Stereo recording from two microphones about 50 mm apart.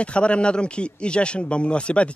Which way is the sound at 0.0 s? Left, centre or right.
Left.